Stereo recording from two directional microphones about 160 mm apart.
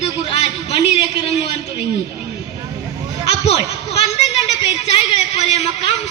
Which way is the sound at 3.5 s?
40° left (ahead or behind).